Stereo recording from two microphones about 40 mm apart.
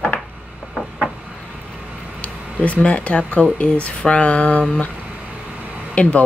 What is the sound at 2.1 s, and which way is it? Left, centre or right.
Speech, left.